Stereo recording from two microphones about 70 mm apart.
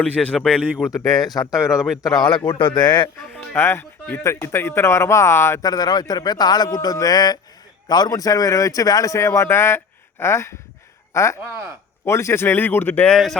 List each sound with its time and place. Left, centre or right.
0.0 s speech: centre
0.9 s speech: left
1.7 s a man's voice: centre
2.0 s a man's voice: left
3.5 s speech: left
5.6 s a man's voice: left
7.9 s a man's voice: left
13.1 s speech: centre